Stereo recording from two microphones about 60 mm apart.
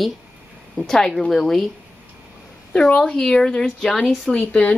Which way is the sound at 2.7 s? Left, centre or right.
Centre.